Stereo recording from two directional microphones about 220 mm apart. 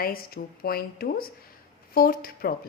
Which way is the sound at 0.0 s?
45° left (ahead or behind).